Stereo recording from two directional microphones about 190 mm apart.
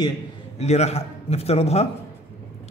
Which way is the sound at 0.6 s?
35° left (ahead or behind).